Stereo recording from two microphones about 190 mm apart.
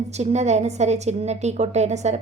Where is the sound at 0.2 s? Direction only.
35° right (ahead or behind).